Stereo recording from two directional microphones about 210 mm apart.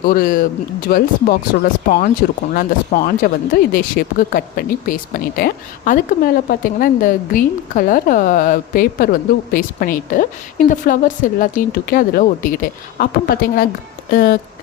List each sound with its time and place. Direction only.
0.1 s speech: 40° left (ahead or behind)